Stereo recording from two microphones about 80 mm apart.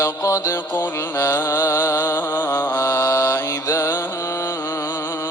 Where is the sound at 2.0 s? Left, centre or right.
Left.